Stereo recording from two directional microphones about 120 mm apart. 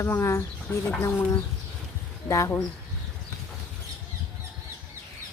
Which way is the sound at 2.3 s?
25° left (ahead or behind).